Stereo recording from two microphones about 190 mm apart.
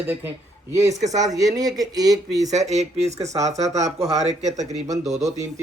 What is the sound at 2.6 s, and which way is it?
Speech, 35° right (ahead or behind).